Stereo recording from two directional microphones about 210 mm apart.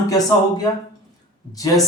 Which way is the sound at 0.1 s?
20° left (ahead or behind).